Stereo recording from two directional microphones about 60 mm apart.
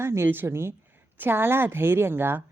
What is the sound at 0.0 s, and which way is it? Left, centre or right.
A woman's voice, right.